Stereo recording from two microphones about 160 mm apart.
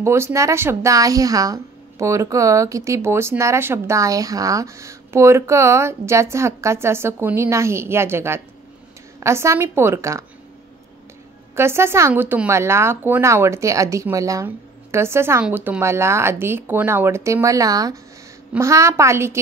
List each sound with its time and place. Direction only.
0.0 s speech: 15° right (ahead or behind)
11.5 s speech: 15° right (ahead or behind)